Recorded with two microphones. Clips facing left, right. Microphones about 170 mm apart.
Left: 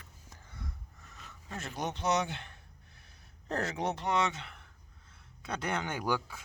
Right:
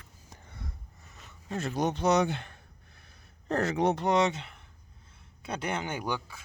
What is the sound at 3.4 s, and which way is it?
Speech, 65° right (ahead or behind).